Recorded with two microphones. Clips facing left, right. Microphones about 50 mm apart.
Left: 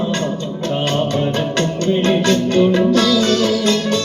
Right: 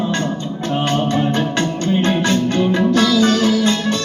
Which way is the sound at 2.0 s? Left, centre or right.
Centre.